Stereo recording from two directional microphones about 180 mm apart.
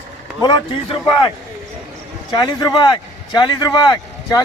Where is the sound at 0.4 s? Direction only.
25° left (ahead or behind).